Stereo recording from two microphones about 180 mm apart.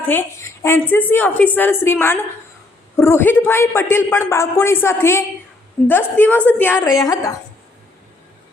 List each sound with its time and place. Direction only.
0.1 s a man's voice: 15° left (ahead or behind)